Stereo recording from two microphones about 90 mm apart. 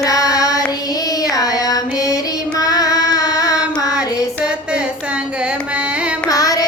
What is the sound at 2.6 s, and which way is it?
Carnatic music, 45° left (ahead or behind).